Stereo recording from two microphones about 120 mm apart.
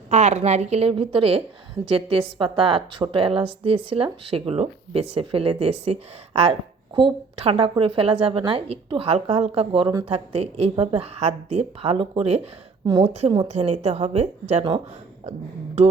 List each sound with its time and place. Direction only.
0.1 s a woman's voice: 70° right (ahead or behind)
12.8 s a woman's voice: 40° right (ahead or behind)
13.1 s a woman's voice: 60° right (ahead or behind)